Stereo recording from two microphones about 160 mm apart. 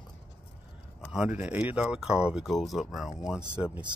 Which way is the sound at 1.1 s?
5° right (ahead or behind).